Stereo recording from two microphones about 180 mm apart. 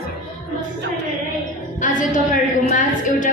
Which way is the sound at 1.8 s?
45° left (ahead or behind).